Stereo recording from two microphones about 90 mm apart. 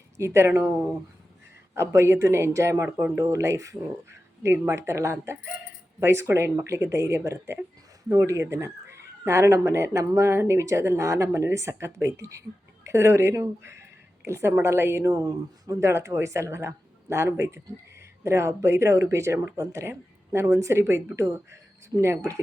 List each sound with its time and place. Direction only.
0.2 s speech: 30° right (ahead or behind)
1.7 s speech: 30° right (ahead or behind)